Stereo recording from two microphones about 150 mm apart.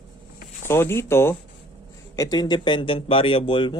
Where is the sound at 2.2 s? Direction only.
25° left (ahead or behind).